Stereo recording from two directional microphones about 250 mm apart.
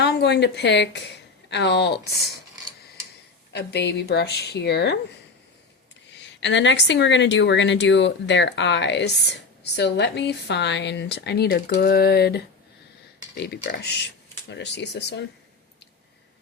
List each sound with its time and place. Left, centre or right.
0.0 s a woman's voice: left
3.5 s speech: left
6.2 s a woman's voice: left